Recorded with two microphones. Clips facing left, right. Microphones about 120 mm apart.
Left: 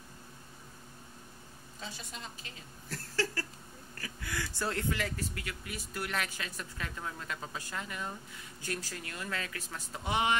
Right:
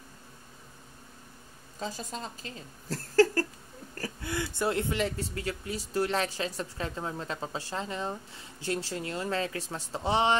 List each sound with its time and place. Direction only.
1.8 s speech: 40° right (ahead or behind)
4.2 s speech: 20° right (ahead or behind)